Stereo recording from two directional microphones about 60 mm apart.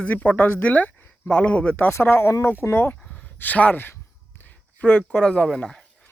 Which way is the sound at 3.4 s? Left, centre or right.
Left.